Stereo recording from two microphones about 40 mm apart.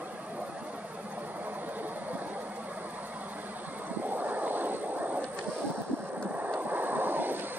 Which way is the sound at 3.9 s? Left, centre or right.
Right.